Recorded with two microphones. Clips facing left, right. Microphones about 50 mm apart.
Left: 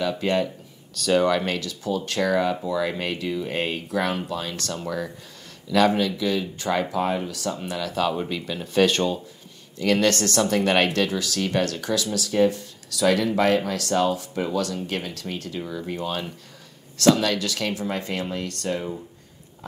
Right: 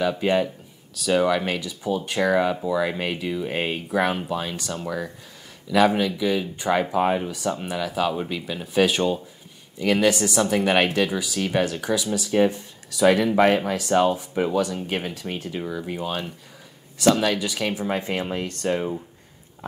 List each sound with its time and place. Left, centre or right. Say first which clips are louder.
0.0 s speech: right 2 dB; centre